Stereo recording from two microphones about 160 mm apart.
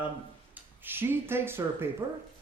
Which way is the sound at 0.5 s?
15° right (ahead or behind).